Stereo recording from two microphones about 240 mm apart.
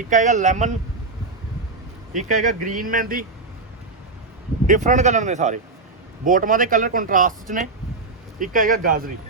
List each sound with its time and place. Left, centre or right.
0.1 s speech: right
2.1 s speech: right
4.6 s speech: right